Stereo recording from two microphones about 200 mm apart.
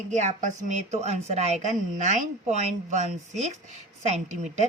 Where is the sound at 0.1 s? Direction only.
35° right (ahead or behind).